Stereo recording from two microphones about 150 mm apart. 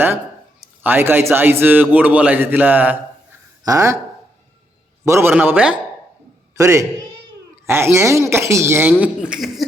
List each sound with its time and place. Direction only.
0.8 s a man's voice: 15° right (ahead or behind)
5.0 s a man's voice: 20° right (ahead or behind)
6.6 s a man's voice: 20° right (ahead or behind); by 9.6 s 5° right (ahead or behind)